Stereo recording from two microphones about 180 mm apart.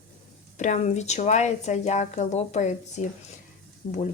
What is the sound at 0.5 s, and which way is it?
Speech, 40° left (ahead or behind).